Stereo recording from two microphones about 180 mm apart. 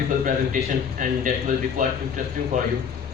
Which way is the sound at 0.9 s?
45° right (ahead or behind).